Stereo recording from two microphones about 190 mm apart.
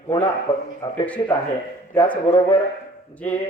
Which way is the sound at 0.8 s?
20° left (ahead or behind).